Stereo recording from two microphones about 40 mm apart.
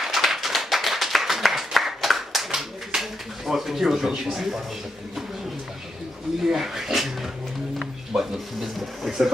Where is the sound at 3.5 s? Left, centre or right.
Centre.